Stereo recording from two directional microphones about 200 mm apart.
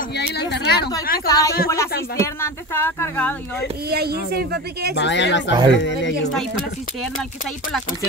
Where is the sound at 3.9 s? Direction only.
50° right (ahead or behind).